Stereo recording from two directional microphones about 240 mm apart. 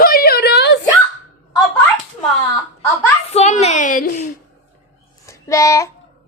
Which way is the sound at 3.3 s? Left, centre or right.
Left.